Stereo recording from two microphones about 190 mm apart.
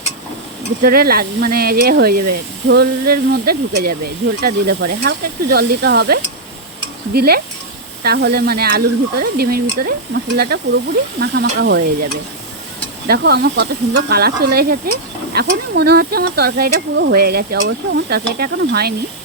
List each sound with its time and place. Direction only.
0.8 s speech: 50° right (ahead or behind)
11.2 s speech: 65° right (ahead or behind)
17.6 s speech: 65° right (ahead or behind)